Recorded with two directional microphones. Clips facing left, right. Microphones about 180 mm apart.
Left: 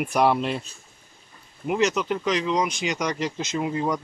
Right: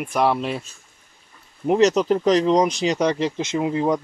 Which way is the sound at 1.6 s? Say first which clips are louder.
Right 6 dB; 35° right (ahead or behind).